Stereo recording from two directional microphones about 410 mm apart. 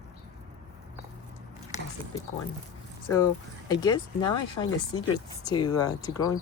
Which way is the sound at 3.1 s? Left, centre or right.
Centre.